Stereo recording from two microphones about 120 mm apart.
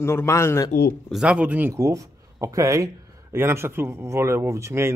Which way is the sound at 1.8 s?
25° right (ahead or behind).